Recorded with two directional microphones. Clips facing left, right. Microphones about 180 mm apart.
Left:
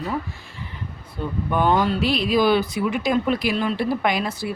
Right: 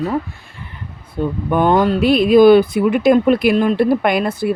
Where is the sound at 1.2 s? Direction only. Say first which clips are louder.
Right 6 dB; 45° right (ahead or behind).